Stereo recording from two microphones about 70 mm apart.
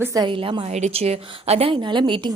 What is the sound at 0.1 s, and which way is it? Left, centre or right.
Speech, right.